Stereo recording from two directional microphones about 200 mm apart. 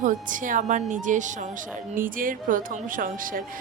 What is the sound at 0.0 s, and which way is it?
A woman's voice, 40° right (ahead or behind).